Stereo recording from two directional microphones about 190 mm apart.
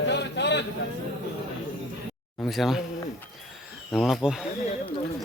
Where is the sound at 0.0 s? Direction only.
65° left (ahead or behind).